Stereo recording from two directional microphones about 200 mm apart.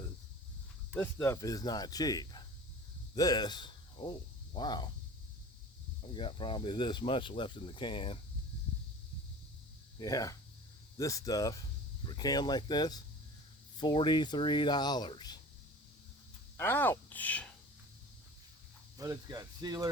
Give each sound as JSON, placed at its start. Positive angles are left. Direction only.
{"t": 0.9, "sound": "speech", "side_deg": 10}
{"t": 6.1, "sound": "speech", "side_deg": 25}
{"t": 10.0, "sound": "speech", "side_deg": 20}
{"t": 16.6, "sound": "speech", "side_deg": 10}
{"t": 18.9, "sound": "speech", "side_deg": -15}